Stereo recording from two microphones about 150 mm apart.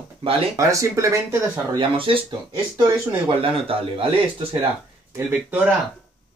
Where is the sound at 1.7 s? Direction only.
35° right (ahead or behind).